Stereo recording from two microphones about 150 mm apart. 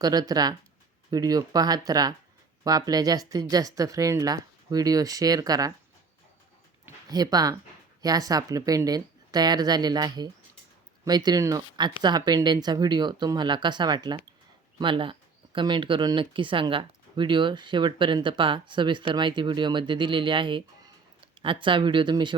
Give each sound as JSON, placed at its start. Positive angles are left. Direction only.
{"t": 0.0, "sound": "a woman's voice", "side_deg": -25}
{"t": 7.1, "sound": "a woman's voice", "side_deg": -25}